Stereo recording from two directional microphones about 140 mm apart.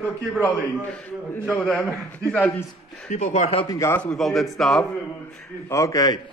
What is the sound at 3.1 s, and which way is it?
Speech, 60° left (ahead or behind).